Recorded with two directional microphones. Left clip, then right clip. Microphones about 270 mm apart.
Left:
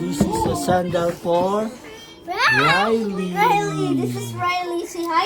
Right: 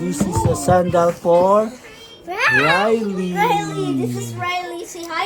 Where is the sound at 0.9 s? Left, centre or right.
Centre.